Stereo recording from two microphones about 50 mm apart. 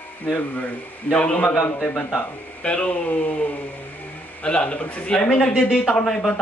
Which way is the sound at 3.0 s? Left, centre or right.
Left.